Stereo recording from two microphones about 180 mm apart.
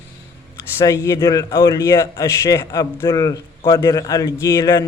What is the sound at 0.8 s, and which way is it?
A man's voice, 20° left (ahead or behind).